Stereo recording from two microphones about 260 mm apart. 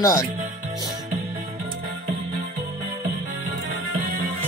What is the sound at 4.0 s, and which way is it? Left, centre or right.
Music, right.